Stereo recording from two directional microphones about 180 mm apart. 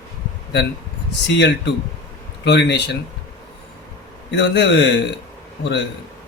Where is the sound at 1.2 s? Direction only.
75° left (ahead or behind).